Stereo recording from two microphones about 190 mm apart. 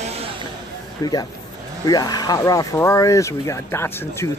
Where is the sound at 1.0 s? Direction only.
20° left (ahead or behind).